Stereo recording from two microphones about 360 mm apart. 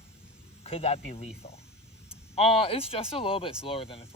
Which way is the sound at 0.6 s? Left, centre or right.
Centre.